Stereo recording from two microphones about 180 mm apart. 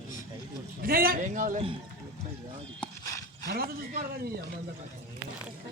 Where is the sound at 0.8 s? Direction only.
55° right (ahead or behind).